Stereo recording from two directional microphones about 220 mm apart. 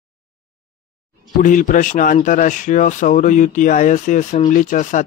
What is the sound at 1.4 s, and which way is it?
Speech, 35° left (ahead or behind).